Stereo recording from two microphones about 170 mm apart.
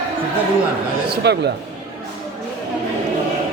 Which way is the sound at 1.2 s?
80° right.